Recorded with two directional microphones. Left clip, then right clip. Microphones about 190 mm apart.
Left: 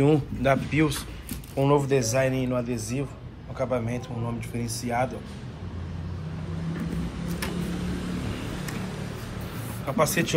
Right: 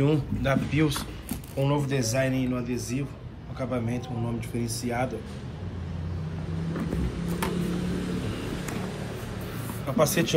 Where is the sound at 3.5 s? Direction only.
10° right (ahead or behind).